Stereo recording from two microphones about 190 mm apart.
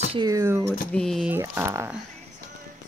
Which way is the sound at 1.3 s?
10° right (ahead or behind).